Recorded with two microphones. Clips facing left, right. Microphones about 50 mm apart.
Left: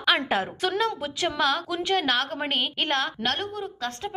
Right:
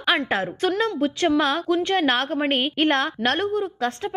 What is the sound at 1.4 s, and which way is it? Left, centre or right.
A woman's voice, centre.